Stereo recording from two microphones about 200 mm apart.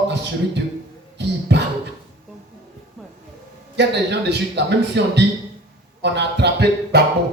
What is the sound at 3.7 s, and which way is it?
A man's voice, 60° right (ahead or behind).